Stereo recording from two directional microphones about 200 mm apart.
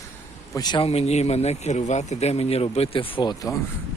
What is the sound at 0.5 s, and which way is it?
Speech, 20° left (ahead or behind).